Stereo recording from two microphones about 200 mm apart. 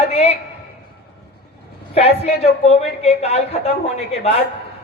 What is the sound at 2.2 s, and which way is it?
Speech, 30° left (ahead or behind).